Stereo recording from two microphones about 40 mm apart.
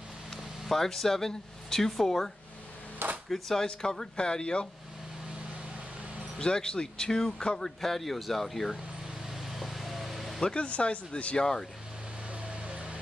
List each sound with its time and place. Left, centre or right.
0.3 s a sound: centre
2.0 s speech: centre
3.6 s speech: centre
6.3 s speech: left; by 8.7 s centre
9.3 s vehicle: centre
10.5 s speech: left
11.3 s speech: centre
12.3 s a sound: right